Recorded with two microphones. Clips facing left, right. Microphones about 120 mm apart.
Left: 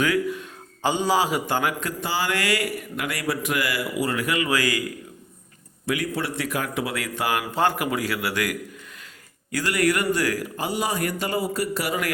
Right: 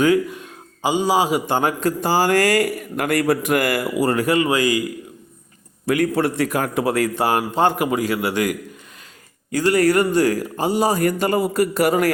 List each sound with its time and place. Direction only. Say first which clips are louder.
0.0 s a man's voice: right 6 dB; 25° right (ahead or behind)
5.8 s a man's voice: right 8 dB; 50° right (ahead or behind)
7.2 s a man's voice: even; 30° right (ahead or behind)